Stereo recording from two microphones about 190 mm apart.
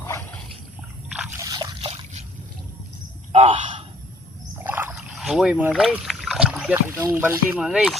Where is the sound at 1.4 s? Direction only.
20° right (ahead or behind).